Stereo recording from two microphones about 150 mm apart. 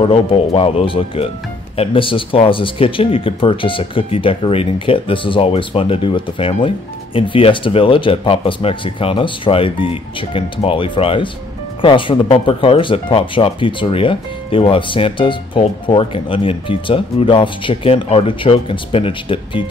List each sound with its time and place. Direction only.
0.0 s speech: 40° left (ahead or behind)